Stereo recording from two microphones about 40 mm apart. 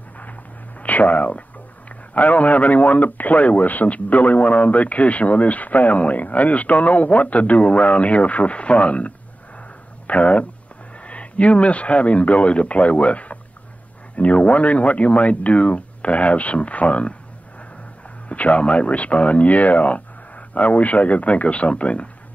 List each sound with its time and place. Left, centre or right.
0.2 s a sound: left
1.9 s a man's voice: left
18.3 s a man's voice: left